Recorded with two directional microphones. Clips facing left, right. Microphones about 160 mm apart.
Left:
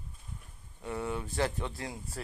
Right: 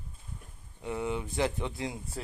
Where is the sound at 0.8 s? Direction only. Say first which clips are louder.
Right 2 dB; 15° right (ahead or behind).